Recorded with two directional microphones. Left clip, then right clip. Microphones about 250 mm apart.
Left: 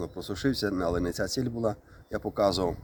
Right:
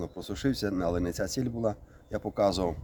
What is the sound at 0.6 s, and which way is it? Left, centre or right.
Speech, centre.